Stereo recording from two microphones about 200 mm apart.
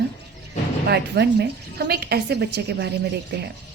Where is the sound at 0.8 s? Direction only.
55° right (ahead or behind).